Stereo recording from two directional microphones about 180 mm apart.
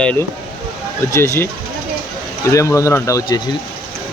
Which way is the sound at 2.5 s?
15° left (ahead or behind).